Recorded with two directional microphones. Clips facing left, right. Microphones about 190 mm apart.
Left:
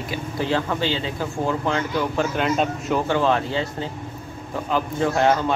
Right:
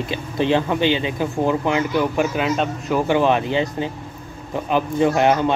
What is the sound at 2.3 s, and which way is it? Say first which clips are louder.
Speech: right 1 dB; 5° right (ahead or behind).